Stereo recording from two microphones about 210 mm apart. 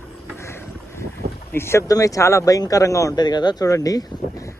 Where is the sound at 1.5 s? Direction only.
10° left (ahead or behind).